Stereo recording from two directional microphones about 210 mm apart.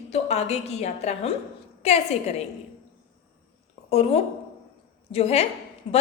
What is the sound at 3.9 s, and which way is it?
A woman's voice, 30° left (ahead or behind).